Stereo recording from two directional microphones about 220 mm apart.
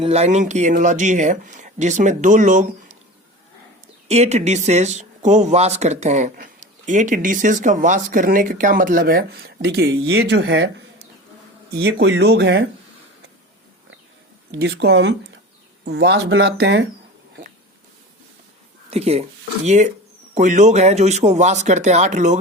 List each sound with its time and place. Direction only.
0.0 s speech: 30° right (ahead or behind)
4.1 s speech: 30° right (ahead or behind); by 10.7 s 50° right (ahead or behind)
11.8 s speech: 55° right (ahead or behind)
14.5 s speech: 50° right (ahead or behind)
18.9 s speech: 30° right (ahead or behind)